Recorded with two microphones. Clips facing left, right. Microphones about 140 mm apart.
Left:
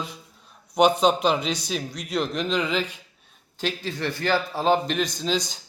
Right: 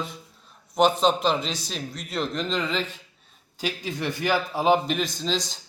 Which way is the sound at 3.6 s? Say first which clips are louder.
Left 1 dB; 15° right (ahead or behind).